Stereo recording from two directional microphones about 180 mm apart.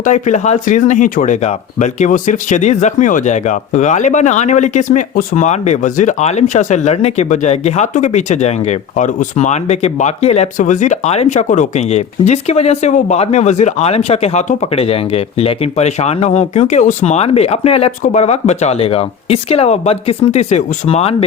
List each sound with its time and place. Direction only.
0.0 s speech: 40° left (ahead or behind)